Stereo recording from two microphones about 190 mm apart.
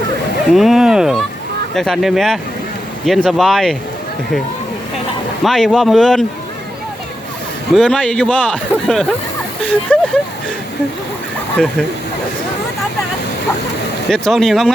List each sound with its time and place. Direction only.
0.5 s speech: centre (ahead or behind)
5.4 s speech: centre (ahead or behind)
7.8 s speech: 5° left (ahead or behind)
11.5 s speech: centre (ahead or behind)
14.1 s speech: centre (ahead or behind)